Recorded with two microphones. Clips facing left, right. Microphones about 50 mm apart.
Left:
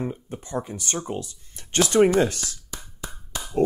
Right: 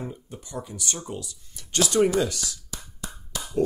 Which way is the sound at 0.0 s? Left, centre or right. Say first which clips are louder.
Left 6 dB; left.